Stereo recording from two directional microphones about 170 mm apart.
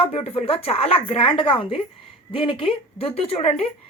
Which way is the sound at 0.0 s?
35° left (ahead or behind).